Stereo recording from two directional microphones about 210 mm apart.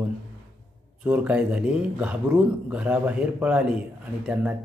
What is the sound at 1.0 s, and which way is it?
Speech, 5° right (ahead or behind).